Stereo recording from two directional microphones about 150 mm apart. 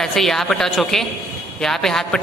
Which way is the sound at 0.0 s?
Centre (ahead or behind).